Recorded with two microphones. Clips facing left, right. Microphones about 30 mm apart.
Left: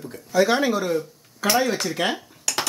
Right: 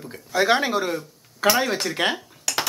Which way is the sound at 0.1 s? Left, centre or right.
Right.